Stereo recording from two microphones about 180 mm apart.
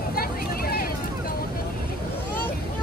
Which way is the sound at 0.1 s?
55° left (ahead or behind).